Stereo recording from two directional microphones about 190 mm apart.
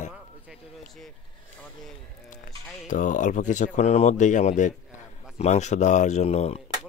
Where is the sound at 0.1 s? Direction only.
Centre (ahead or behind).